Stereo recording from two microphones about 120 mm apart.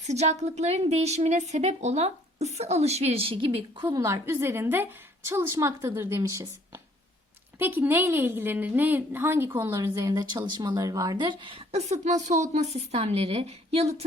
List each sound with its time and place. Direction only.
0.0 s a woman's voice: 70° right (ahead or behind); by 3.8 s 50° right (ahead or behind)
3.9 s a woman's voice: 25° right (ahead or behind)
11.2 s a woman's voice: 40° right (ahead or behind); by 13.9 s 60° right (ahead or behind)